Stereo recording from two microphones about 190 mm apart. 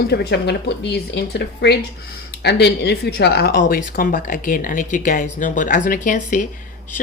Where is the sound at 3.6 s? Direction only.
45° left (ahead or behind).